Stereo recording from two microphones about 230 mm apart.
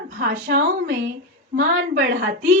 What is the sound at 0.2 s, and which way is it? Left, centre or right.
Speech, right.